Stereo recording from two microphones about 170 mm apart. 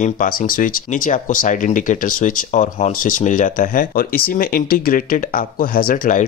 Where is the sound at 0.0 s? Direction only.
55° left (ahead or behind).